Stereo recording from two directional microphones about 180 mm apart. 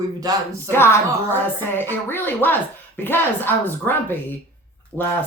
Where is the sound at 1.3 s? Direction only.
10° left (ahead or behind).